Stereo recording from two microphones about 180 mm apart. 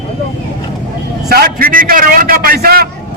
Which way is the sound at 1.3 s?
55° right (ahead or behind).